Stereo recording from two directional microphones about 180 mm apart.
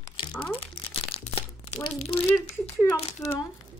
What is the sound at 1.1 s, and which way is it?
Crumpling, 35° left (ahead or behind).